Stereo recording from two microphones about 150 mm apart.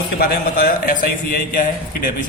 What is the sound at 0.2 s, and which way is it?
A man's voice, 70° left (ahead or behind).